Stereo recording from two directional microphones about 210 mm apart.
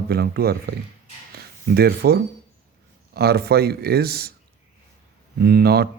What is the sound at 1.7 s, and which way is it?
A man's voice, 50° right (ahead or behind).